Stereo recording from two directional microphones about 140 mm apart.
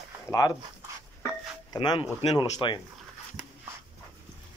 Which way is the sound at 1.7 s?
30° left (ahead or behind).